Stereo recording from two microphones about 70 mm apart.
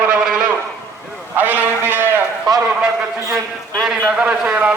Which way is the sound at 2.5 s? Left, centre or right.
Right.